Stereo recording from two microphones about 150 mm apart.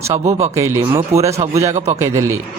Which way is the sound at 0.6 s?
20° right (ahead or behind).